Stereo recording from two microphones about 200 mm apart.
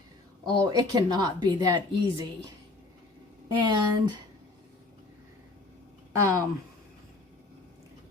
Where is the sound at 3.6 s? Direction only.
20° right (ahead or behind).